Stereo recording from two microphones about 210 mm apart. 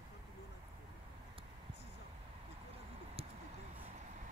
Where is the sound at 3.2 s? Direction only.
25° right (ahead or behind).